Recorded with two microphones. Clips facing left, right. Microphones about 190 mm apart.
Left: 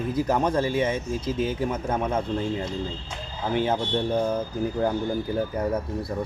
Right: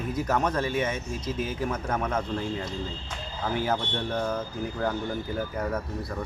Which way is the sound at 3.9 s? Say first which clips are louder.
Left 5 dB; 30° left (ahead or behind).